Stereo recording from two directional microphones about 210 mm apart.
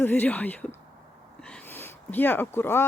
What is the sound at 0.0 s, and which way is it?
Speech, 10° left (ahead or behind).